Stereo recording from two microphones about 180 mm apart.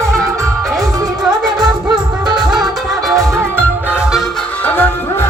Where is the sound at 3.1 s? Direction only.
15° right (ahead or behind).